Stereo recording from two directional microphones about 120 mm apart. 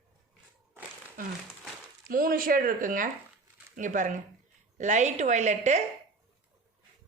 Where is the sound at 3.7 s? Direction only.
90° right.